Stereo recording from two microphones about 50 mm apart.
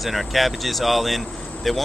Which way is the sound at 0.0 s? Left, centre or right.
Centre.